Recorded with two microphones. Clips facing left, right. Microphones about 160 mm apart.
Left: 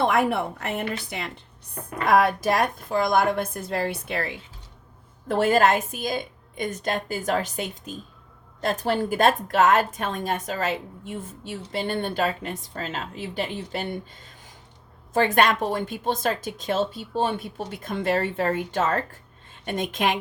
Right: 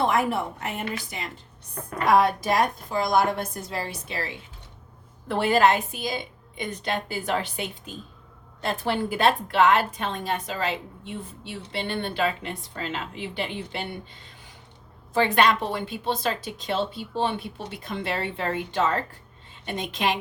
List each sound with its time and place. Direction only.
0.0 s a woman's voice: 60° left (ahead or behind)
2.0 s a woman's voice: 55° left (ahead or behind)
5.3 s a woman's voice: 45° left (ahead or behind)